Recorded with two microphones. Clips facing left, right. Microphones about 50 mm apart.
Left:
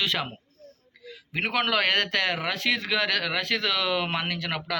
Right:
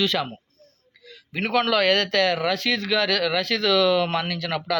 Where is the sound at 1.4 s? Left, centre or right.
Centre.